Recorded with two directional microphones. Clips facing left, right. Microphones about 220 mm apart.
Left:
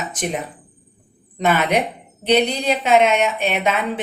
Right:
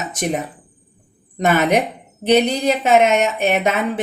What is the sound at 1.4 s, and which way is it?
Speech, 45° right (ahead or behind).